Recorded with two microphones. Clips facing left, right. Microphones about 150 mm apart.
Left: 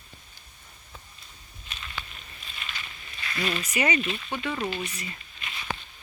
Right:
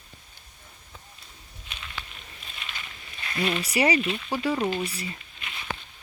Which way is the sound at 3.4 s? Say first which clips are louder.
Right 3 dB; 20° right (ahead or behind).